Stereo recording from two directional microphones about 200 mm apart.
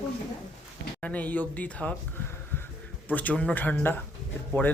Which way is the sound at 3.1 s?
10° left (ahead or behind).